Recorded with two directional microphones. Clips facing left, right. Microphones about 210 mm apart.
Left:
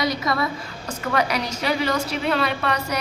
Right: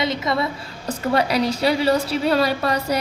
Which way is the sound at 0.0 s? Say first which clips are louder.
Right 1 dB; 25° right (ahead or behind).